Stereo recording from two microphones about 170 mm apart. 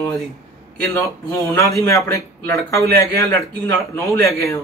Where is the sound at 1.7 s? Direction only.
20° left (ahead or behind).